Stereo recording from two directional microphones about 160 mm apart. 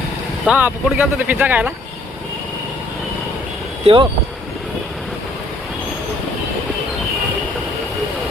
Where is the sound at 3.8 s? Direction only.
30° right (ahead or behind).